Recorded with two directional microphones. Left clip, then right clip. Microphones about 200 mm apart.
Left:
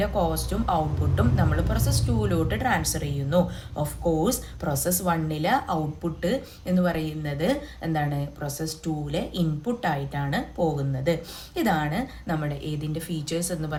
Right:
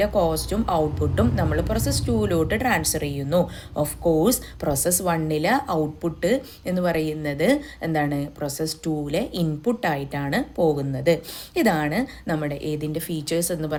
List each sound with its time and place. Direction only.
0.0 s a woman's voice: 40° right (ahead or behind)